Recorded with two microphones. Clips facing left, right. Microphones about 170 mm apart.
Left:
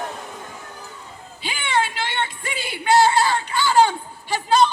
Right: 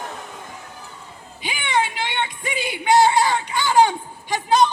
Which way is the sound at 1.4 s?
15° right (ahead or behind).